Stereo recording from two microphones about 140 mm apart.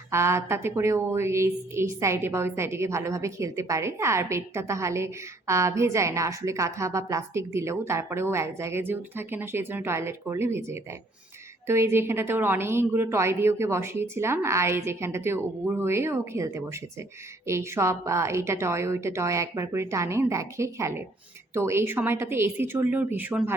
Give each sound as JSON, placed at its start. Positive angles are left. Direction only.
{"t": 0.1, "sound": "a woman's voice", "side_deg": -20}